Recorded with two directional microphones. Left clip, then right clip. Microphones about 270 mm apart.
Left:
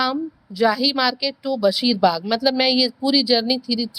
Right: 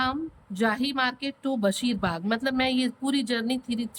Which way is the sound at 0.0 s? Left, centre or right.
Centre.